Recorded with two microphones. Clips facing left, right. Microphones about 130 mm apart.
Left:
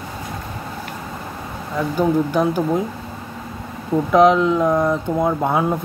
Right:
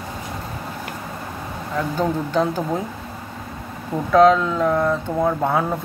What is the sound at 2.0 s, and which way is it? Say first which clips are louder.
Speech: left 4 dB; 10° left (ahead or behind).